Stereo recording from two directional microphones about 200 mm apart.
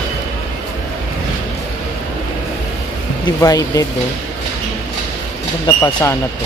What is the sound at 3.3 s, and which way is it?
Speech, 15° left (ahead or behind).